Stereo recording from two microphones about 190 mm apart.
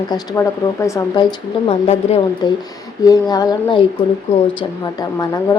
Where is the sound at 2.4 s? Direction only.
20° left (ahead or behind).